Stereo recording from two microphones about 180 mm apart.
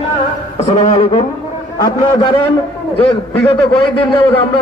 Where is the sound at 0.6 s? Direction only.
30° left (ahead or behind).